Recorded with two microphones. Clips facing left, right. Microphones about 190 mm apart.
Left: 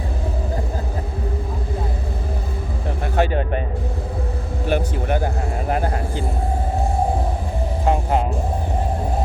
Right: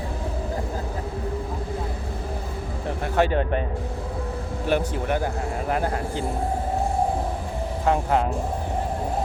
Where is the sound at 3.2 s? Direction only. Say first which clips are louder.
Left 1 dB; 10° left (ahead or behind).